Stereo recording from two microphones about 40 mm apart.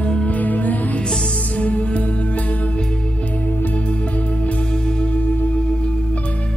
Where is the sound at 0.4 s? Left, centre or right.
Left.